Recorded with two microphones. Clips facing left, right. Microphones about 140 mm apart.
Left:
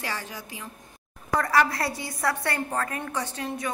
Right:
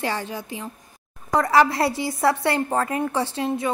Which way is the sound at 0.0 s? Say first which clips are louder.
Right 7 dB; 25° right (ahead or behind).